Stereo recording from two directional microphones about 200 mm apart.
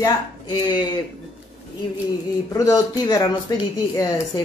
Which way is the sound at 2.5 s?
20° left (ahead or behind).